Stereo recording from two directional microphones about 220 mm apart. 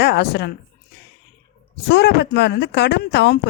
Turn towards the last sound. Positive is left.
turn(degrees=50)  # may be behind; listen again after turning